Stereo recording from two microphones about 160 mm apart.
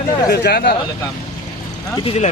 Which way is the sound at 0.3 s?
90° left.